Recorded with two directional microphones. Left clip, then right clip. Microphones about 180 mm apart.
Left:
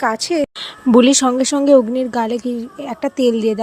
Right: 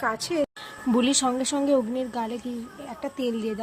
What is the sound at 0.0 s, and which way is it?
Speech, 35° left (ahead or behind).